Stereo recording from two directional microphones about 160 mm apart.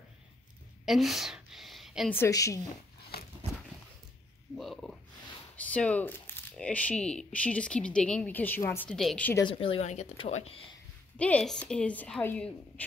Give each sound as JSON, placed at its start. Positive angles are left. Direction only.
{"t": 0.8, "sound": "a sound", "side_deg": 0}
{"t": 2.0, "sound": "a woman's voice", "side_deg": 15}
{"t": 4.6, "sound": "speech", "side_deg": 0}
{"t": 9.4, "sound": "speech", "side_deg": 35}
{"t": 11.1, "sound": "speech", "side_deg": 10}